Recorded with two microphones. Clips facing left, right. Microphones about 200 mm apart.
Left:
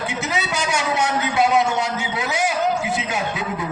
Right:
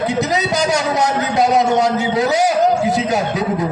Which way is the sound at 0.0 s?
40° right (ahead or behind).